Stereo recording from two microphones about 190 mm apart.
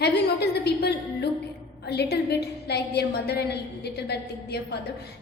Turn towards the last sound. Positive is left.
turn(degrees=60)  # may be behind; listen again after turning